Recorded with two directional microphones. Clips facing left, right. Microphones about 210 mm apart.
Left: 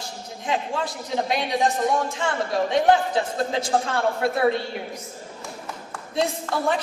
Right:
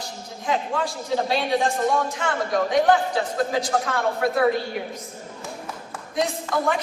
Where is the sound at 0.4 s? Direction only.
20° left (ahead or behind).